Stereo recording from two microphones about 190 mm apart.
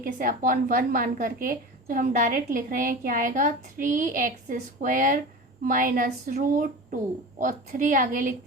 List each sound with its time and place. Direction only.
0.0 s a woman's voice: 45° right (ahead or behind)